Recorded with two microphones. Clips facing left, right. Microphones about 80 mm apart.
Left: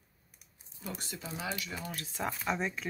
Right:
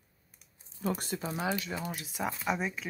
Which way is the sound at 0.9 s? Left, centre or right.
Right.